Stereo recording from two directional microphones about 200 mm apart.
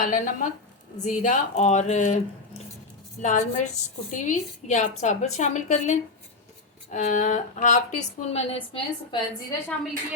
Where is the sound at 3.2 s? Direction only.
35° left (ahead or behind).